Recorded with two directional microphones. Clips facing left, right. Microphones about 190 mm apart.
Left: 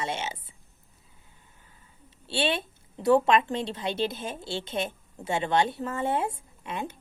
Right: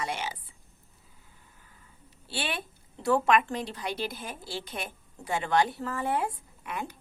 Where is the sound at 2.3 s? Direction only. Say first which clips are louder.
Left 7 dB; 25° left (ahead or behind).